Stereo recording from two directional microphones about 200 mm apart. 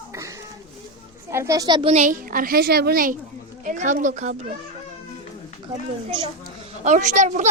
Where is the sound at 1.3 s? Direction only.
15° right (ahead or behind); by 3.1 s 50° right (ahead or behind).